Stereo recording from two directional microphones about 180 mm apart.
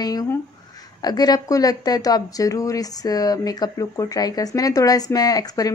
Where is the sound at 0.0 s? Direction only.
20° left (ahead or behind).